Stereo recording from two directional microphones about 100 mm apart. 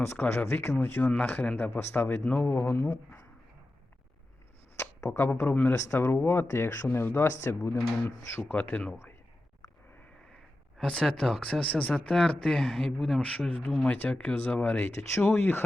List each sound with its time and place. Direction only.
0.0 s speech: 25° left (ahead or behind)
4.8 s speech: 30° left (ahead or behind)
8.7 s speech: 10° left (ahead or behind)
10.8 s speech: 5° left (ahead or behind)